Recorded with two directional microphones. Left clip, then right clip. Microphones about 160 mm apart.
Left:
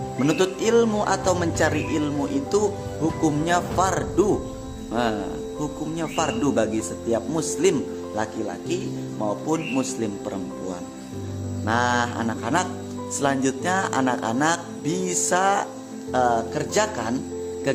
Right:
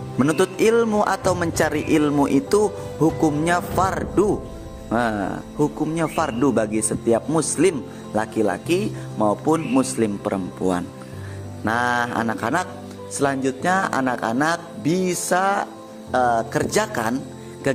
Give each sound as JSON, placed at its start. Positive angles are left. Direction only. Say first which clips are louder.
{"t": 0.2, "sound": "music", "louder": "right 4 dB", "side_deg": -50}
{"t": 4.9, "sound": "speech", "louder": "right 3 dB", "side_deg": -45}
{"t": 9.2, "sound": "music", "louder": "right 6 dB", "side_deg": -45}
{"t": 10.6, "sound": "speech", "louder": "right 13 dB", "side_deg": -65}
{"t": 11.6, "sound": "music", "louder": "right 1 dB", "side_deg": -50}
{"t": 13.1, "sound": "music", "louder": "right 1 dB", "side_deg": -30}
{"t": 16.1, "sound": "music", "louder": "right 2 dB", "side_deg": -35}
{"t": 17.7, "sound": "speech", "louder": "right 2 dB", "side_deg": -45}